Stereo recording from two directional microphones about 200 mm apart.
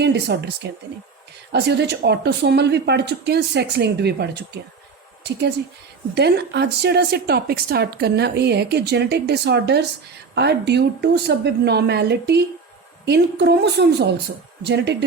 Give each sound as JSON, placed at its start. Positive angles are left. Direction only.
{"t": 0.0, "sound": "a woman's voice", "side_deg": -55}